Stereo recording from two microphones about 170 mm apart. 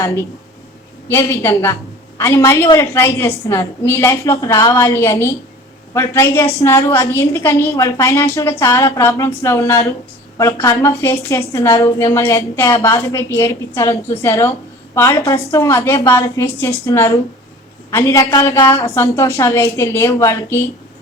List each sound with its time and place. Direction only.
0.0 s a woman's voice: 15° left (ahead or behind)